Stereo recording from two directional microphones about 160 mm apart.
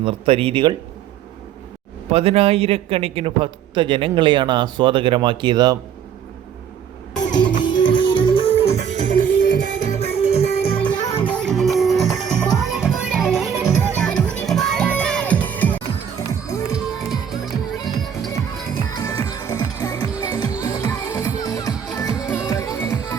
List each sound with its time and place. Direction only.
0.0 s a man's voice: 35° right (ahead or behind)
2.0 s a man's voice: 40° right (ahead or behind)
7.3 s music: 30° left (ahead or behind)
11.2 s music: 5° left (ahead or behind)
16.7 s music: centre (ahead or behind)
18.9 s music: 20° left (ahead or behind)